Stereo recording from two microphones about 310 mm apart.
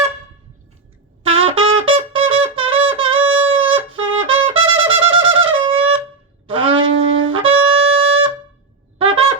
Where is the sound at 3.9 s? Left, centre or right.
Right.